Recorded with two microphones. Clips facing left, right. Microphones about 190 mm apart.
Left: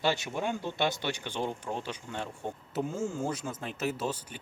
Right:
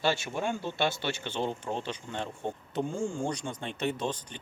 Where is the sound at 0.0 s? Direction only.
15° left (ahead or behind).